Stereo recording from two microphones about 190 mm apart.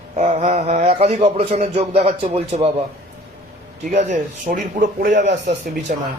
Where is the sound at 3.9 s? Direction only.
35° right (ahead or behind).